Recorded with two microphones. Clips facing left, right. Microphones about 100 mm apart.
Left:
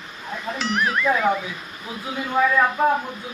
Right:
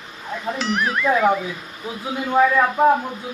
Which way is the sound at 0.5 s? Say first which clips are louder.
Even; centre (ahead or behind).